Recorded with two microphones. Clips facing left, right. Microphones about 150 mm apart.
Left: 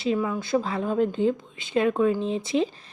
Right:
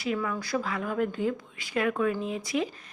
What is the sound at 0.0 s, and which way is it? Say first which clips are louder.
Speech: left 5 dB; 25° left (ahead or behind).